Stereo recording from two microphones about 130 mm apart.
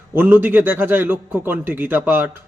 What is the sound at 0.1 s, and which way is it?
A man's voice, 15° right (ahead or behind).